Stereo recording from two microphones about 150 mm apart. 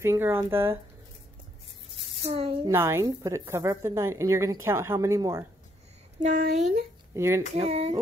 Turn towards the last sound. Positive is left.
turn(degrees=-45)  # may be behind; listen again after turning